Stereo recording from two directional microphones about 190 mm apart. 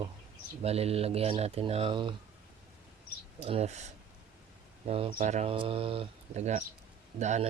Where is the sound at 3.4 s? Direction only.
35° right (ahead or behind).